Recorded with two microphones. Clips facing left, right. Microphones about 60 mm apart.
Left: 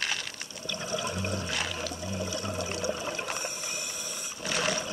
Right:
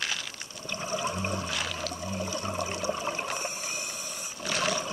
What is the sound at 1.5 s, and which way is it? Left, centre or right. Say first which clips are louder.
Water: even; centre.